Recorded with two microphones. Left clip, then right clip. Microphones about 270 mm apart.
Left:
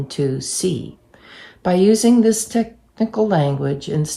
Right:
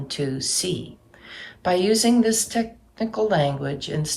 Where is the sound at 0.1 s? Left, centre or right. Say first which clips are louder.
Left 3 dB; centre.